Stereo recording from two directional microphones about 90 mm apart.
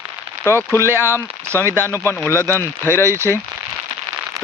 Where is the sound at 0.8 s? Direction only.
25° right (ahead or behind).